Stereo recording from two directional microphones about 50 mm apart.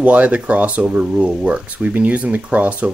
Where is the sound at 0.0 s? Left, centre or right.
Right.